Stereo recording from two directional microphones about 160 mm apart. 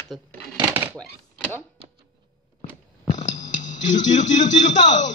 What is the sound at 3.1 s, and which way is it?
Music, 50° left (ahead or behind).